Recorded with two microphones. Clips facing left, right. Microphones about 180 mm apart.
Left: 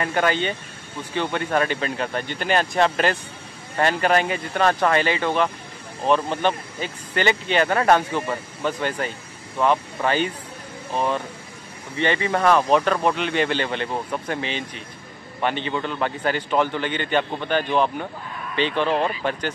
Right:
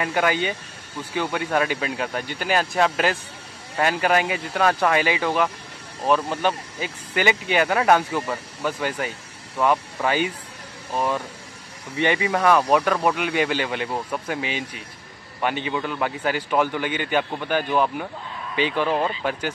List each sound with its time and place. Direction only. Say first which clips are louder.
0.0 s a man's voice: even; 10° right (ahead or behind)
12.0 s a man's voice: even; 10° right (ahead or behind)